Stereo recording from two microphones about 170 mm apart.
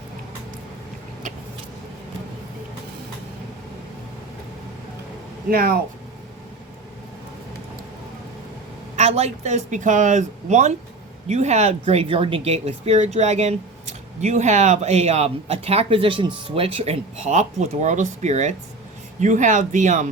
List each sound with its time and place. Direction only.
5.5 s speech: 60° right (ahead or behind)
9.0 s speech: 40° right (ahead or behind)